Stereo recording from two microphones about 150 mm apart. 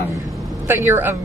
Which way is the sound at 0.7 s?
15° right (ahead or behind).